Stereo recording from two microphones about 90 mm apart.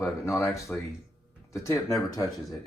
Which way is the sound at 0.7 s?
25° left (ahead or behind).